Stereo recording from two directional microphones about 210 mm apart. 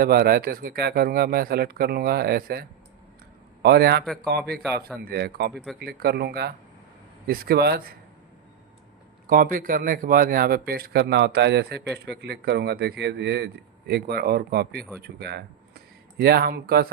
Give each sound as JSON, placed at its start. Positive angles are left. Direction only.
{"t": 0.0, "sound": "speech", "side_deg": -45}
{"t": 4.0, "sound": "speech", "side_deg": 0}
{"t": 4.3, "sound": "speech", "side_deg": -50}
{"t": 9.2, "sound": "speech", "side_deg": -40}